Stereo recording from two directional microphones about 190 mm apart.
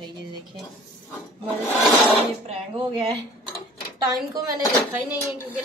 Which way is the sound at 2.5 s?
30° right (ahead or behind).